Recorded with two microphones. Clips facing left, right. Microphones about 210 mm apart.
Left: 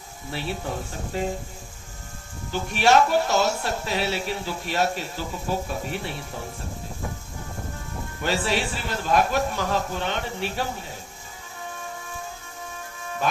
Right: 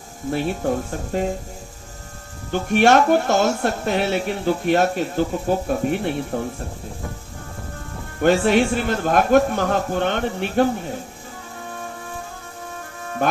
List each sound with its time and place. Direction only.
0.3 s speech: 50° right (ahead or behind)
2.5 s speech: 55° right (ahead or behind)
8.2 s speech: 55° right (ahead or behind)
13.2 s speech: 55° right (ahead or behind)